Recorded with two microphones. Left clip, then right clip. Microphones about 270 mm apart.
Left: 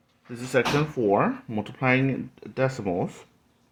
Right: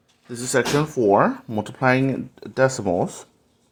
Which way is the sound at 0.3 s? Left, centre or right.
Right.